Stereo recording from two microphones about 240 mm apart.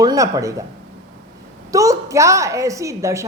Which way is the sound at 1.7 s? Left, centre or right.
Centre.